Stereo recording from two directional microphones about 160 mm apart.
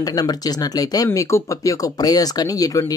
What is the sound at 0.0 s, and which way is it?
Speech, 25° left (ahead or behind).